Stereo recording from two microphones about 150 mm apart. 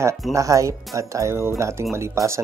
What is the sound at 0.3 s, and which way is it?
Speech, 20° right (ahead or behind).